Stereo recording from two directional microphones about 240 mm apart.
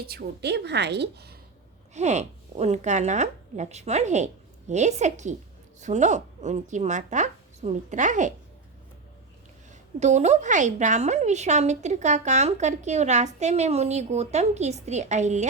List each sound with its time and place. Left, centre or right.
0.1 s a woman's voice: right
1.9 s a woman's voice: right
10.0 s speech: right